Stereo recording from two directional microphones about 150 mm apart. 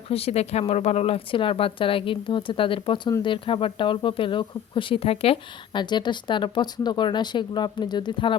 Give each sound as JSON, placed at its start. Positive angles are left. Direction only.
{"t": 0.1, "sound": "speech", "side_deg": 45}